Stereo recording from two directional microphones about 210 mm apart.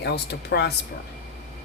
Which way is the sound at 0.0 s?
50° left (ahead or behind).